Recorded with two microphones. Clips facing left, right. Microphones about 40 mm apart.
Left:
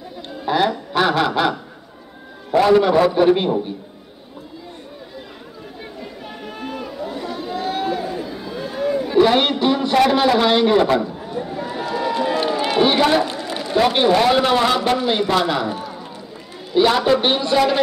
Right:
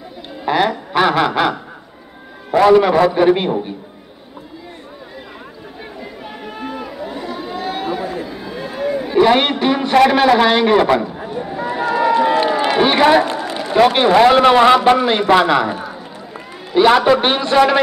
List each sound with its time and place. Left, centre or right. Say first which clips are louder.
0.5 s speech: right 2 dB; centre
2.7 s speech: right 1 dB; centre
6.2 s a sound: right 3 dB; centre
10.3 s speech: right 3 dB; centre
11.3 s run: right 4 dB; centre
15.4 s a man's voice: right 5 dB; right
16.7 s a man's voice: right 4 dB; right